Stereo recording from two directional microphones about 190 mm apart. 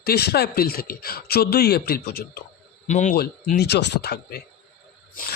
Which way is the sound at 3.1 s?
55° left (ahead or behind).